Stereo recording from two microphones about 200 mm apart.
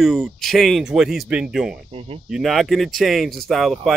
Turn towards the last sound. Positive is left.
turn(degrees=0)  # may be behind; listen again after turning